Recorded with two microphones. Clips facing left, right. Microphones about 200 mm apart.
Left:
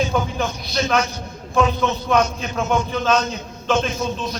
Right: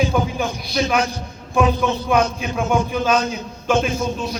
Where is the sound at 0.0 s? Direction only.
10° right (ahead or behind).